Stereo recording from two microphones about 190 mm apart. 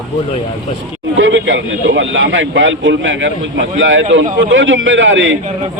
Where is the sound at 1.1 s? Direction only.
90° right.